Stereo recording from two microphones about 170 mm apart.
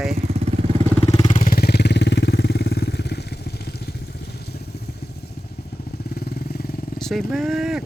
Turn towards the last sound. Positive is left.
turn(degrees=0)  # may be behind; listen again after turning